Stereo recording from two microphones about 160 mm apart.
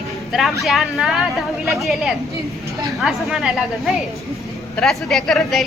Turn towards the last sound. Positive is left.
turn(degrees=0)  # may be behind; listen again after turning